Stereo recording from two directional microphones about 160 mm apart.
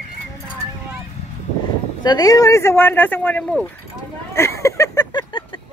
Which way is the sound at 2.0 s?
25° left (ahead or behind).